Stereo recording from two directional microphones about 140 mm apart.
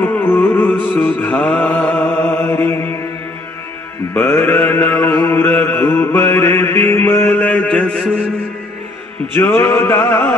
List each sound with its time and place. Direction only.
0.0 s music: 15° left (ahead or behind)
4.1 s mantra: 15° left (ahead or behind)
9.3 s music: 15° left (ahead or behind)